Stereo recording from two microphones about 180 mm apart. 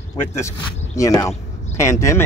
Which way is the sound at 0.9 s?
20° left (ahead or behind).